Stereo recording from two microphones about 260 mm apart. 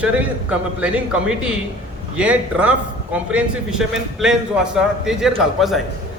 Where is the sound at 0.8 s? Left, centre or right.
Centre.